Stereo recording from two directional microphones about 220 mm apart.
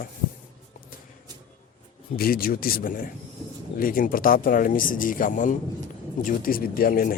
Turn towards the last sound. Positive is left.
turn(degrees=40)  # may be behind; listen again after turning